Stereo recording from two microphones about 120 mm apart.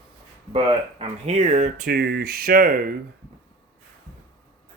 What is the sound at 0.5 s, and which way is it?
Speech, 55° right (ahead or behind).